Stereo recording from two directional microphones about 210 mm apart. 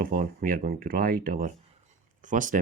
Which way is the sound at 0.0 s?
40° right (ahead or behind).